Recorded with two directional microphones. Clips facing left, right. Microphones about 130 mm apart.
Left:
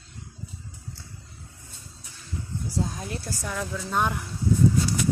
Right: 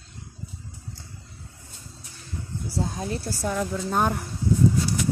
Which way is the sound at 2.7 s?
35° right (ahead or behind).